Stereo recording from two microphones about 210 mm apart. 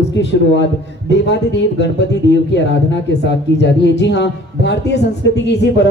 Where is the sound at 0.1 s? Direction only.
55° left (ahead or behind).